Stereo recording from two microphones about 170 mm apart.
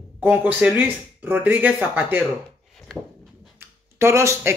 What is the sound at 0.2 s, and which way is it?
Speech, 10° right (ahead or behind).